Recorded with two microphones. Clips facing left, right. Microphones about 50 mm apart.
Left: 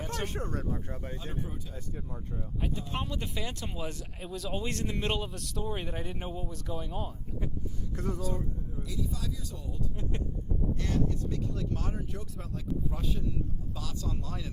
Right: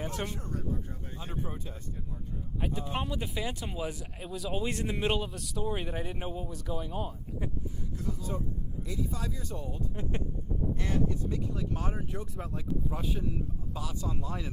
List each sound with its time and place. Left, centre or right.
0.3 s speech: left
1.2 s speech: right
2.6 s speech: centre
7.9 s speech: left
8.9 s speech: right
10.8 s speech: centre